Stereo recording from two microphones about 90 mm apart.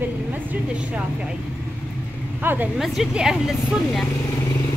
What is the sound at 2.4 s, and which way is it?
Speech, 20° right (ahead or behind).